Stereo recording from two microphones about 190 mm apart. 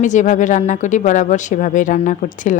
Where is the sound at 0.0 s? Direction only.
40° left (ahead or behind).